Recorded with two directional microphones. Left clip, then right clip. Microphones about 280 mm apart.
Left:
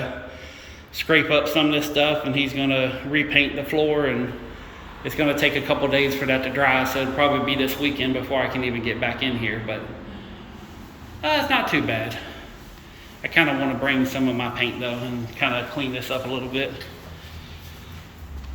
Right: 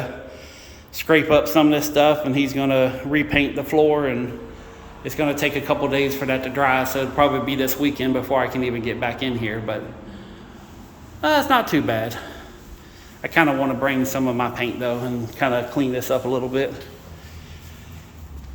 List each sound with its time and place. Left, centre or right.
0.9 s a man's voice: centre
11.2 s speech: right
13.2 s a man's voice: centre